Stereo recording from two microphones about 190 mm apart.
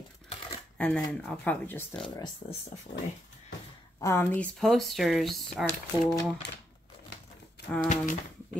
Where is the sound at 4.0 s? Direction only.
15° left (ahead or behind).